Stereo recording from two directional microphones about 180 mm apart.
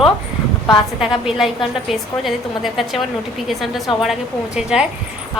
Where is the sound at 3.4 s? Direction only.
Centre (ahead or behind).